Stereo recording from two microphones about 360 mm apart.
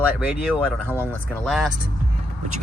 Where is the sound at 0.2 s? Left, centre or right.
Centre.